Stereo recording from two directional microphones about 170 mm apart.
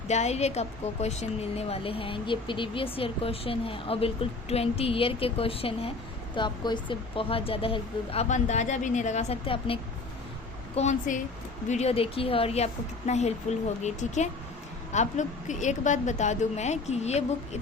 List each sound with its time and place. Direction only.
0.1 s a woman's voice: 40° left (ahead or behind)
10.8 s a woman's voice: 45° left (ahead or behind)